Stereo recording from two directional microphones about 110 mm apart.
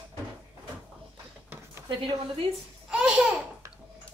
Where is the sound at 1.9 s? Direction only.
50° right (ahead or behind).